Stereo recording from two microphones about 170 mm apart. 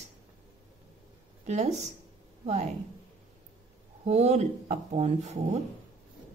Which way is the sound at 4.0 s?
40° right (ahead or behind).